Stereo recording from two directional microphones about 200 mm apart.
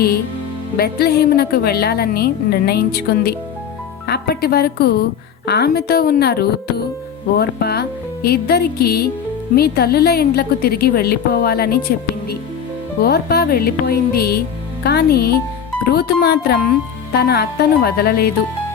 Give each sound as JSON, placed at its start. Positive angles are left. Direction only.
{"t": 0.8, "sound": "a woman's voice", "side_deg": 50}